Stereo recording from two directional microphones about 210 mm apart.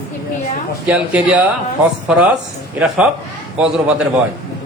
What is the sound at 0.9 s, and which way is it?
Speech, 5° right (ahead or behind).